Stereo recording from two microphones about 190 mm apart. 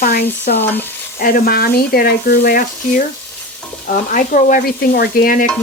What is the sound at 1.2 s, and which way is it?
Speech, 50° left (ahead or behind).